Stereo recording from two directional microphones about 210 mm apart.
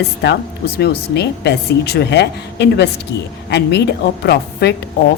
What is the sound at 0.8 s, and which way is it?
A woman's voice, 55° left (ahead or behind).